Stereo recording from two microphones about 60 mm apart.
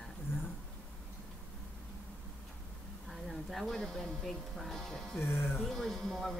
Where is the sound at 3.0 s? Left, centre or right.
Centre.